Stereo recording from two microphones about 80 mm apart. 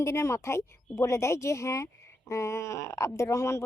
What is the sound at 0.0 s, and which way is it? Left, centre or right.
Speech, left.